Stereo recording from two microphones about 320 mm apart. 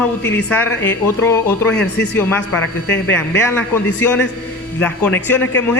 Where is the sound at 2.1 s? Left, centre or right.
Centre.